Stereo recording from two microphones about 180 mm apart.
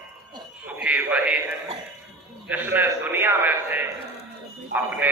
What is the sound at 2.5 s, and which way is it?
A man's voice, 10° right (ahead or behind).